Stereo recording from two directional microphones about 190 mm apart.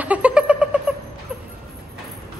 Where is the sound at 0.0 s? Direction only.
5° right (ahead or behind).